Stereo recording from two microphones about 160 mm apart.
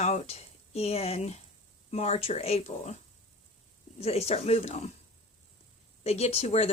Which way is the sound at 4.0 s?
40° left (ahead or behind).